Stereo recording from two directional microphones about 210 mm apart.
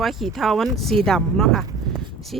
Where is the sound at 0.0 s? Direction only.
Centre (ahead or behind).